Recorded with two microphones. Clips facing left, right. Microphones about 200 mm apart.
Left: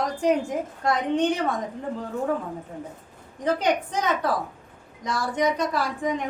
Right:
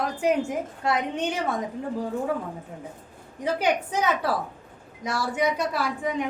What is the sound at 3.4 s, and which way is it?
A woman's voice, 10° right (ahead or behind).